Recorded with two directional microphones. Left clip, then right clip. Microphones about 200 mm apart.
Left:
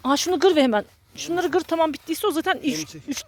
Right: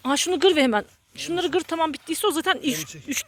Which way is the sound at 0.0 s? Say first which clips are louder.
Left 1 dB; 20° left (ahead or behind).